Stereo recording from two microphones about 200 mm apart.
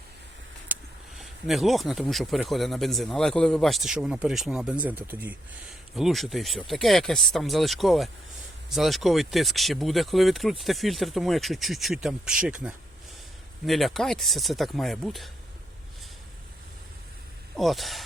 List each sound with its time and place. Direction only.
0.7 s a sound: 10° right (ahead or behind)
1.2 s speech: centre (ahead or behind)
13.7 s speech: centre (ahead or behind)
17.6 s speech: centre (ahead or behind)